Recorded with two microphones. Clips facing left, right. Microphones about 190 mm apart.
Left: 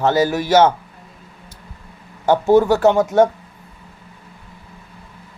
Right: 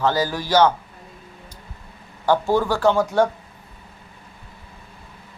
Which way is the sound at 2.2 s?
20° left (ahead or behind).